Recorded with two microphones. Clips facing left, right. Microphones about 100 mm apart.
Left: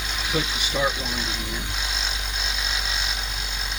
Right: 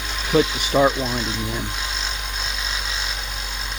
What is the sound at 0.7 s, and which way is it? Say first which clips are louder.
Speech: right 7 dB; 50° right (ahead or behind).